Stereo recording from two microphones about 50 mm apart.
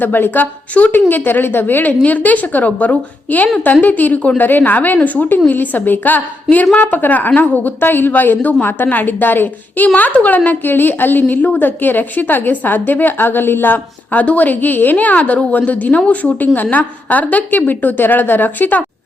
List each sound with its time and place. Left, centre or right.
0.0 s a woman's voice: left